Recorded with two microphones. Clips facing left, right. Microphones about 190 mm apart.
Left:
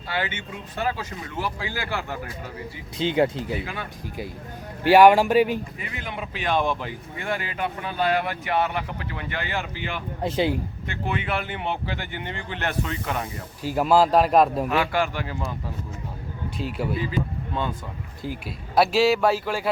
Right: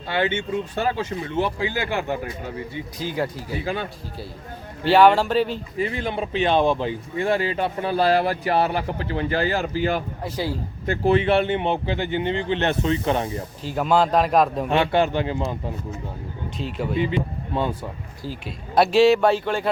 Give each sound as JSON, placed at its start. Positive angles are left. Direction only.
{"t": 0.1, "sound": "speech", "side_deg": -30}
{"t": 3.0, "sound": "speech", "side_deg": 25}
{"t": 3.6, "sound": "speech", "side_deg": -25}
{"t": 4.8, "sound": "a man's voice", "side_deg": 10}
{"t": 5.7, "sound": "speech", "side_deg": -30}
{"t": 10.2, "sound": "speech", "side_deg": 20}
{"t": 10.8, "sound": "speech", "side_deg": -35}
{"t": 13.6, "sound": "speech", "side_deg": 10}
{"t": 14.7, "sound": "speech", "side_deg": -25}
{"t": 16.6, "sound": "a man's voice", "side_deg": 10}
{"t": 17.0, "sound": "speech", "side_deg": -25}
{"t": 18.4, "sound": "speech", "side_deg": 5}